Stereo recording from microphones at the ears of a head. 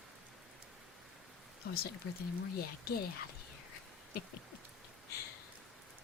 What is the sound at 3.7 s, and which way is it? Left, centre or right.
Dog, left.